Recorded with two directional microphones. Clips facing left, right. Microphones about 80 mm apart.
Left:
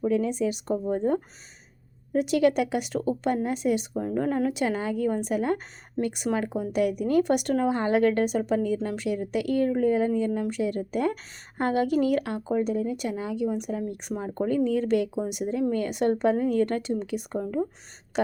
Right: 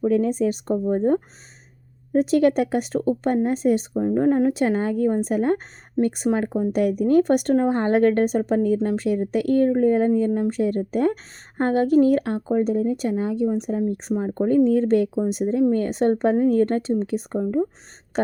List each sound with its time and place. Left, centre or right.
0.0 s speech: right